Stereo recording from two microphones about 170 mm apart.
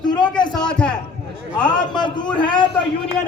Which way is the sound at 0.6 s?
5° left (ahead or behind).